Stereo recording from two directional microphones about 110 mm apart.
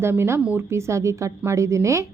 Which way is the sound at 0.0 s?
20° right (ahead or behind).